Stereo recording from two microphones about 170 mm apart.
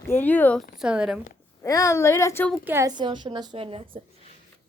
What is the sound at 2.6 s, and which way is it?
Speech, 15° right (ahead or behind).